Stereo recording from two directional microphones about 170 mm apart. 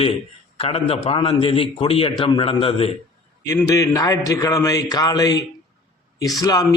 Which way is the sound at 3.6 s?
20° left (ahead or behind).